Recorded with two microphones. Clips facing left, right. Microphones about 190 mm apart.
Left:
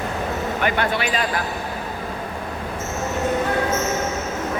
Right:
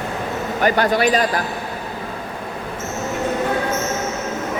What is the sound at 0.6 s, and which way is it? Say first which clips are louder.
Speech: right 7 dB; 40° right (ahead or behind).